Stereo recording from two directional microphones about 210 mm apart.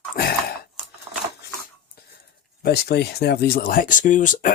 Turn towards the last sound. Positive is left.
turn(degrees=40)  # may be behind; listen again after turning